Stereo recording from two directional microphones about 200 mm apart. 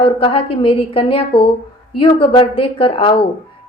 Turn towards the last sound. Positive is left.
turn(degrees=25)  # may be behind; listen again after turning